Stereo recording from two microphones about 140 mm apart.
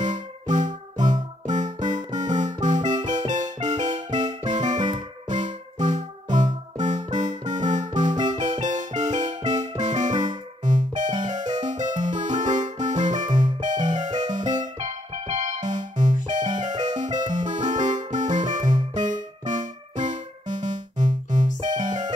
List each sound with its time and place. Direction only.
0.0 s music: 60° right (ahead or behind)